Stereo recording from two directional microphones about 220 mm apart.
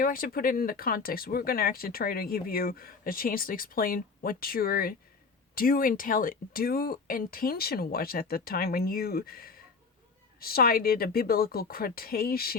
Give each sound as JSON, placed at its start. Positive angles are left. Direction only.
{"t": 0.0, "sound": "speech", "side_deg": 40}